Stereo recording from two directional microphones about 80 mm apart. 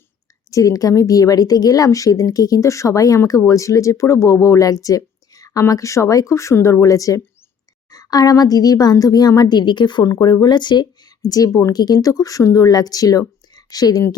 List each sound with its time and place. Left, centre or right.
0.5 s speech: left
10.0 s speech: left
10.4 s speech: left